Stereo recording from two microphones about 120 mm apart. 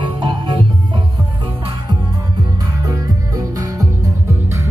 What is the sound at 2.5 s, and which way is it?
Music, 30° right (ahead or behind).